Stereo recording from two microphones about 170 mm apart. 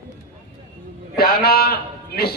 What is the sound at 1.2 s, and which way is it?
A man's voice, 65° left (ahead or behind).